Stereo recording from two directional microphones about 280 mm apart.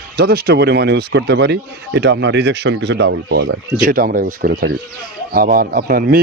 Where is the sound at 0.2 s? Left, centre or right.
Right.